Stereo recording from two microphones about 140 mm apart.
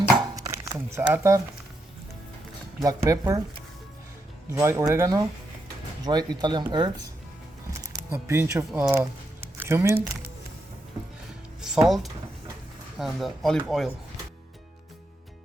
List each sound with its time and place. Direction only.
0.6 s a sound: 20° right (ahead or behind)
2.8 s speech: 25° right (ahead or behind)
4.5 s speech: 20° right (ahead or behind)
7.7 s speech: 20° right (ahead or behind)
11.6 s speech: 5° right (ahead or behind)